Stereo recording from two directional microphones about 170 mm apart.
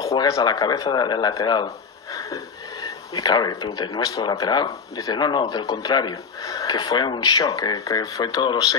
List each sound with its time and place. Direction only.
0.0 s speech: 20° left (ahead or behind)
3.2 s speech: 25° left (ahead or behind)